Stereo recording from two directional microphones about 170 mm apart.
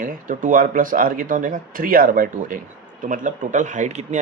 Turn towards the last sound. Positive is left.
turn(degrees=-45)  # may be behind; listen again after turning